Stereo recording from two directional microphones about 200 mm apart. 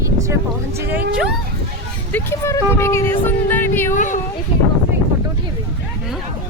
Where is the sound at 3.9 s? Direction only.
40° left (ahead or behind).